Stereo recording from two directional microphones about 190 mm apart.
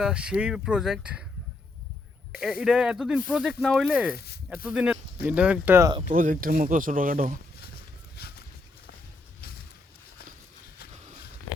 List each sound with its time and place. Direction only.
0.0 s speech: 5° right (ahead or behind)
2.4 s speech: centre (ahead or behind)
6.1 s speech: 45° right (ahead or behind)
8.1 s a sound: 55° left (ahead or behind)